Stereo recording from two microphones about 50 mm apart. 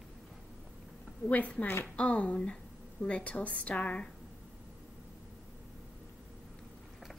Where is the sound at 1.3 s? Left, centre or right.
Left.